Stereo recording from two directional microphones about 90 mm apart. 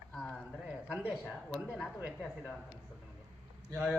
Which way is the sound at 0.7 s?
10° right (ahead or behind).